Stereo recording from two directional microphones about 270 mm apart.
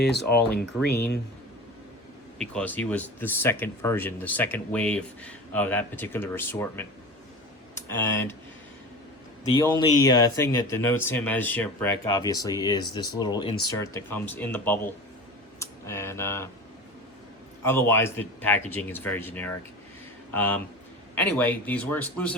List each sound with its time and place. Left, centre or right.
0.0 s speech: left
2.4 s speech: centre
9.7 s speech: centre
17.6 s a man's voice: centre